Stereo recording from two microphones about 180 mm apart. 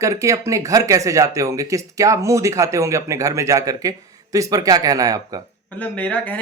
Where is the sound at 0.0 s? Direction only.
15° right (ahead or behind).